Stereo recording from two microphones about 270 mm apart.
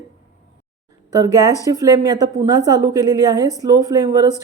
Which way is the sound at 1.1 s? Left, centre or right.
Centre.